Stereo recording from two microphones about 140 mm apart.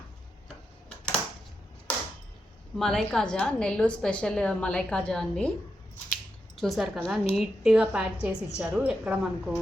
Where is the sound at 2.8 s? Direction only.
5° left (ahead or behind).